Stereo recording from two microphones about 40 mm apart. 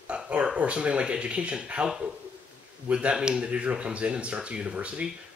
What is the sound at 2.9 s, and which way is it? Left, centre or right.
Speech, right.